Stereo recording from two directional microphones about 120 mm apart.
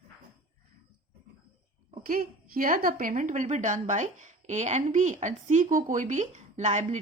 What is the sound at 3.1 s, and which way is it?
Speech, 90° right.